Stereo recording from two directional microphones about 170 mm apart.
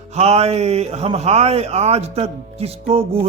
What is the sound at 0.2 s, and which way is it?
A man's voice, 40° right (ahead or behind).